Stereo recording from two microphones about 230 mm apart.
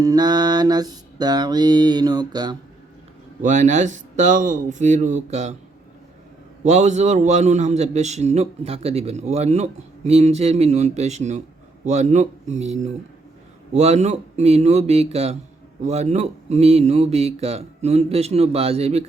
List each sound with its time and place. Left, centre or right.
0.0 s mantra: centre
3.4 s speech: right
6.6 s a man's voice: right